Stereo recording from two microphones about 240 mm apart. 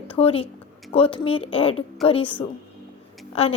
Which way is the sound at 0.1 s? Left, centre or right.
Left.